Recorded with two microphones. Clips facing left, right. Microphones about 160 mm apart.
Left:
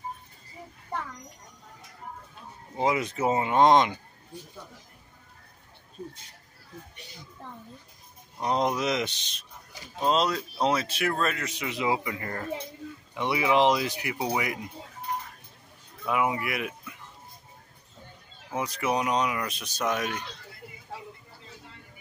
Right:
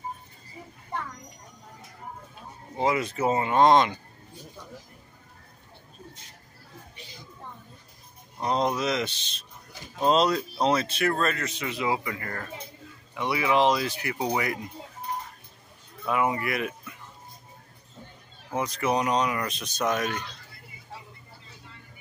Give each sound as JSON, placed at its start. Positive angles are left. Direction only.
{"t": 2.8, "sound": "speech", "side_deg": 15}
{"t": 8.4, "sound": "speech", "side_deg": 15}
{"t": 10.0, "sound": "speech", "side_deg": 0}
{"t": 16.1, "sound": "speech", "side_deg": 10}
{"t": 18.6, "sound": "speech", "side_deg": 5}